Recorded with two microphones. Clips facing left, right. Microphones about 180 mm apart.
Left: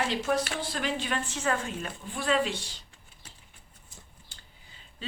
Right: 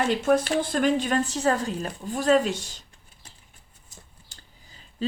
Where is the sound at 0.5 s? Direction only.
50° right (ahead or behind).